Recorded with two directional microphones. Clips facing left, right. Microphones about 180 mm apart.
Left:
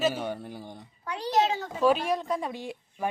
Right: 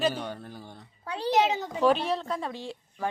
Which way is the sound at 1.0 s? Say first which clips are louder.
Right 1 dB; 30° right (ahead or behind).